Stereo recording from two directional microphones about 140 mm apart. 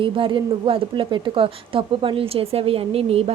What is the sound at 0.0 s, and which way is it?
Speech, 35° right (ahead or behind).